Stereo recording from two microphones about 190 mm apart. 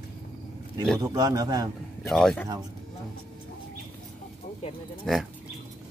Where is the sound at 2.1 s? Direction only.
Centre (ahead or behind).